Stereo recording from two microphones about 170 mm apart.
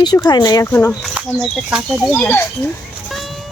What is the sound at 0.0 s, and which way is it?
Speech, 25° left (ahead or behind).